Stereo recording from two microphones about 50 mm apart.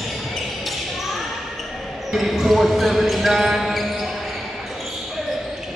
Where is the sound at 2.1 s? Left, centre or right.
Centre.